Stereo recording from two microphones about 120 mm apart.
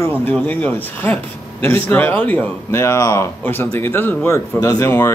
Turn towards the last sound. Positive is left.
turn(degrees=25)  # may be behind; listen again after turning